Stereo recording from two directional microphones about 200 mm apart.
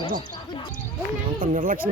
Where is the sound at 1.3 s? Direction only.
45° right (ahead or behind).